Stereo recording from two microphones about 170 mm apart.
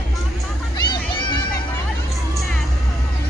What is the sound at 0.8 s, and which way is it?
Music, 25° left (ahead or behind).